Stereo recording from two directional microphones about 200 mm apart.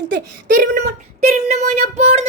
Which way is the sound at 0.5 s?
35° right (ahead or behind).